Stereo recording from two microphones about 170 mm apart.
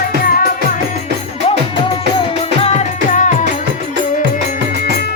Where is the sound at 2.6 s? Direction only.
40° left (ahead or behind).